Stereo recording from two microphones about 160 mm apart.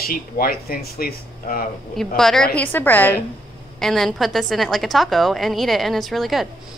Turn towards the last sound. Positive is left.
turn(degrees=0)  # may be behind; listen again after turning